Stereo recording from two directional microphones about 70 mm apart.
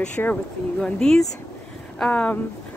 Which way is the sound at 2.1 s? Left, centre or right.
Left.